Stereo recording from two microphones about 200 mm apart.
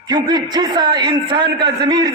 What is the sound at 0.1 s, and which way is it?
A man's voice, 20° right (ahead or behind).